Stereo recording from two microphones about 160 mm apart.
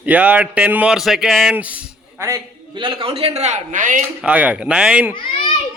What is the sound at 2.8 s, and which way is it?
A man's voice, 30° right (ahead or behind).